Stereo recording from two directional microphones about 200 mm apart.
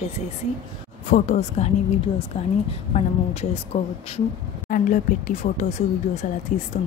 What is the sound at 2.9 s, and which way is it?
Speech, 30° left (ahead or behind).